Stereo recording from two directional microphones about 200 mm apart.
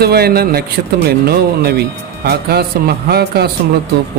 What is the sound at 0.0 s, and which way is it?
Speech, 50° right (ahead or behind).